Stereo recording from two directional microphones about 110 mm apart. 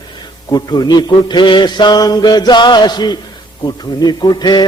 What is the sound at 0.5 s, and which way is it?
Mantra, 40° left (ahead or behind).